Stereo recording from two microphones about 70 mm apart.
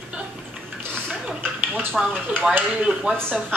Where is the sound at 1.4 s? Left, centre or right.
Right.